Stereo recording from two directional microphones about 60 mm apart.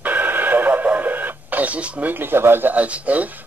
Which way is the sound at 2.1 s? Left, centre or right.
Right.